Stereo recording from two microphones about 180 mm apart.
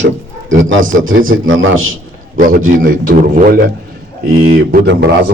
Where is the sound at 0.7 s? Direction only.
90° right.